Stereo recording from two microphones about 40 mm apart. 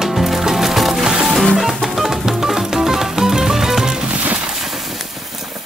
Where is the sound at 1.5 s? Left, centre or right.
Centre.